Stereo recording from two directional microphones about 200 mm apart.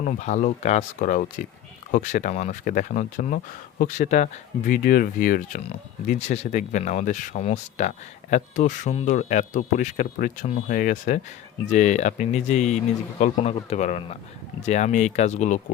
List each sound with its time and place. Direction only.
0.0 s speech: 35° left (ahead or behind)